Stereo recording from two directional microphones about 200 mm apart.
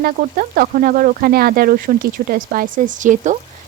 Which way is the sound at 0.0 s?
45° right (ahead or behind).